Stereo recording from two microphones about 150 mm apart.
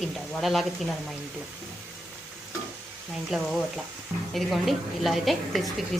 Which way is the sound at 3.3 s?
Centre (ahead or behind).